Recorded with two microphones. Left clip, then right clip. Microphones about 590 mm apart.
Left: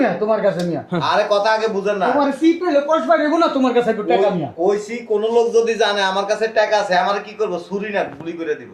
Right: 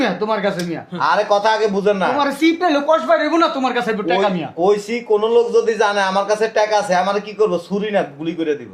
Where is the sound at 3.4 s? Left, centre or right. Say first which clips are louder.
Left 1 dB; left.